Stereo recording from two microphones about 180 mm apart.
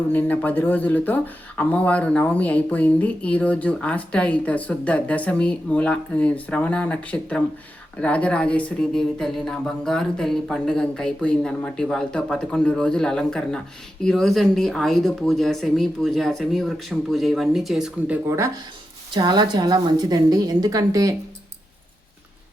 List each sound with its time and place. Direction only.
0.1 s speech: 10° left (ahead or behind)
18.3 s a woman's voice: 15° right (ahead or behind)